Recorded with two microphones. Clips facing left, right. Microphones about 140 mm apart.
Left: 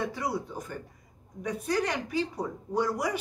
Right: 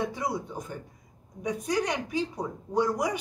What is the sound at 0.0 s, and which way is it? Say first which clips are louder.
A woman's voice: right 1 dB; 15° right (ahead or behind).